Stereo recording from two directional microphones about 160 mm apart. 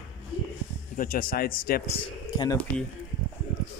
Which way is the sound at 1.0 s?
60° left (ahead or behind).